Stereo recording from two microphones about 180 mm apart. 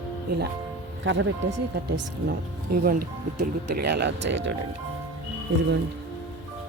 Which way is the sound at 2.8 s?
60° right (ahead or behind).